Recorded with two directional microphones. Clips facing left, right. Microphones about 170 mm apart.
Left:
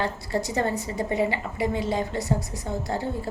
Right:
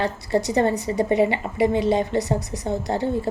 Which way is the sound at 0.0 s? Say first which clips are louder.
Right 5 dB; 20° right (ahead or behind).